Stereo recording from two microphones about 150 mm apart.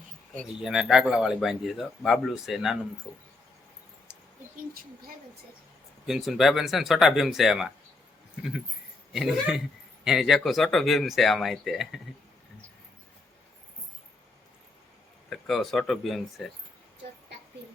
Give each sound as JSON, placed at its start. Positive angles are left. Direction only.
{"t": 0.6, "sound": "speech", "side_deg": -5}
{"t": 3.1, "sound": "speech", "side_deg": 15}
{"t": 6.1, "sound": "speech", "side_deg": -5}
{"t": 9.1, "sound": "speech", "side_deg": 0}
{"t": 15.3, "sound": "speech", "side_deg": 0}